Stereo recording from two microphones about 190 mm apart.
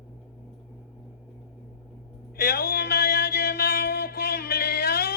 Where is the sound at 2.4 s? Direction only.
55° left (ahead or behind).